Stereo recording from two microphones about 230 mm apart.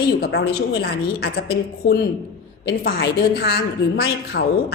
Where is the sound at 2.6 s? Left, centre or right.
Left.